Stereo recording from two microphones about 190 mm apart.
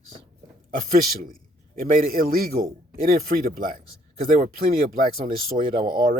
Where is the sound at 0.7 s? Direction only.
50° right (ahead or behind).